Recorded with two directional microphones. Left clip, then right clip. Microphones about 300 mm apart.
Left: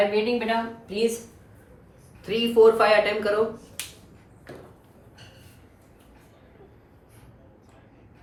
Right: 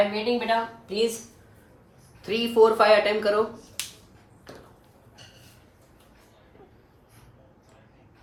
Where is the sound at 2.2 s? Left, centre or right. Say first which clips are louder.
Left 2 dB; right.